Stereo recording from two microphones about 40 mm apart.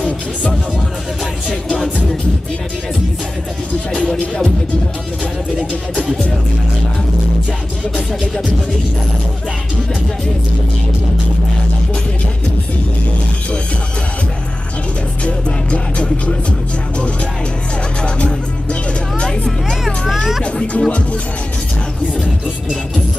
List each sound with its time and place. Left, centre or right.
0.0 s speech: left
3.9 s speech: left
15.2 s music: left
18.0 s music: left
20.7 s speech: left